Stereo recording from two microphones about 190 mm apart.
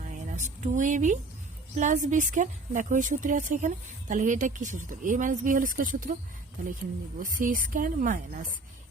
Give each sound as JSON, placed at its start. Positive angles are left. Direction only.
{"t": 0.1, "sound": "a woman's voice", "side_deg": -40}
{"t": 7.2, "sound": "a woman's voice", "side_deg": -45}